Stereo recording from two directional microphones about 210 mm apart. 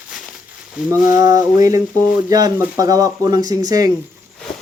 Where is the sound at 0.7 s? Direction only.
10° right (ahead or behind).